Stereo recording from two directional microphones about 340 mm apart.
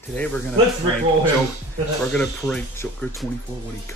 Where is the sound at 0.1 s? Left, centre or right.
Centre.